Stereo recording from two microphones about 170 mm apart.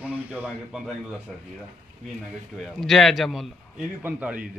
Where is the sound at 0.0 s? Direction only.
10° right (ahead or behind).